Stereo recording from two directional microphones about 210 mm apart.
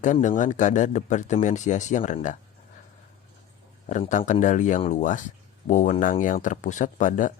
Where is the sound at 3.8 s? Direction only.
35° left (ahead or behind).